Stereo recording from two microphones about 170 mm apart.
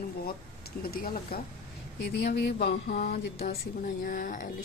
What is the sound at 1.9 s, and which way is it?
Speech, 70° left (ahead or behind).